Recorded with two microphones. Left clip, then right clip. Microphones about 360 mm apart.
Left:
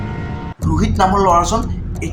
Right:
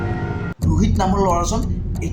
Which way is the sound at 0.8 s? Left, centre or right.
Right.